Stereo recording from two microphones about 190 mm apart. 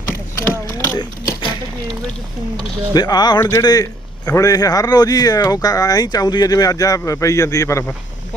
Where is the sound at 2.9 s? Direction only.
20° left (ahead or behind).